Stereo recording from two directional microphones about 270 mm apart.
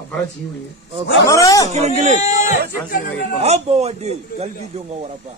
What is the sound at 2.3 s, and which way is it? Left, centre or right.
Speech, left.